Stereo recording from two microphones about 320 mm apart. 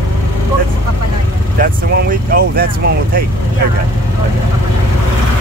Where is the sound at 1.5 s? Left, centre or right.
Right.